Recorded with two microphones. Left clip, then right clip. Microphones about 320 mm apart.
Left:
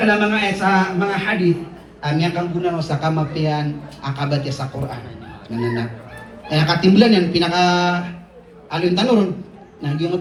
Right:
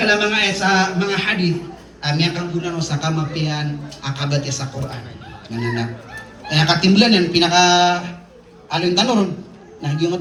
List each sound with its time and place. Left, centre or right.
0.1 s a man's voice: centre